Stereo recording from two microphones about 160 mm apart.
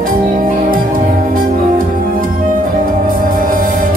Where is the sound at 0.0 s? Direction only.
60° right (ahead or behind).